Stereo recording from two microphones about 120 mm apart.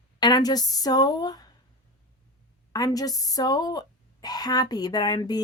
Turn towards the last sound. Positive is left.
turn(degrees=35)  # may be behind; listen again after turning